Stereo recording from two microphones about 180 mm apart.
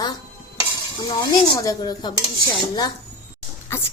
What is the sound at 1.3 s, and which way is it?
Dishes, 25° left (ahead or behind).